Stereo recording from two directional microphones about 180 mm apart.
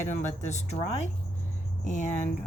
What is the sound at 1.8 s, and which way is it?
Speech, 45° left (ahead or behind).